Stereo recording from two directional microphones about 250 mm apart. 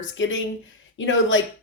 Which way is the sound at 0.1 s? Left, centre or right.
Left.